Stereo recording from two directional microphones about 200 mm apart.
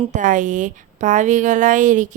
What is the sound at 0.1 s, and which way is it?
Speech, 40° right (ahead or behind).